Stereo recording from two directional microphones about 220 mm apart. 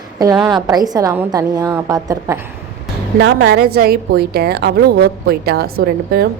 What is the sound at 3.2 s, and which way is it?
A woman's voice, 50° right (ahead or behind).